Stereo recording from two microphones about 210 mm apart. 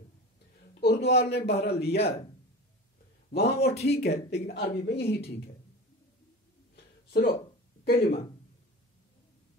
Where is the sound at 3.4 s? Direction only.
30° left (ahead or behind).